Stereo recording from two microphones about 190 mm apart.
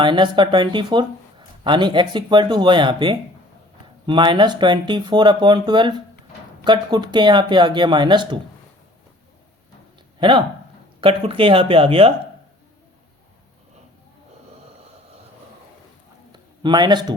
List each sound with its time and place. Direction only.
0.0 s speech: 25° right (ahead or behind)
10.2 s speech: 25° right (ahead or behind)
16.3 s speech: 25° right (ahead or behind)